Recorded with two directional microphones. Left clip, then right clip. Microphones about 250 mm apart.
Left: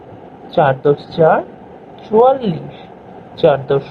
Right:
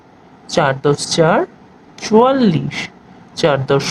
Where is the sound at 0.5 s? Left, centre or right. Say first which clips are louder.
Left 2 dB; right.